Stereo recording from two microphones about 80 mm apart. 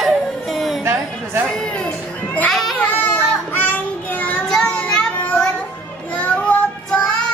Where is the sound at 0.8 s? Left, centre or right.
Right.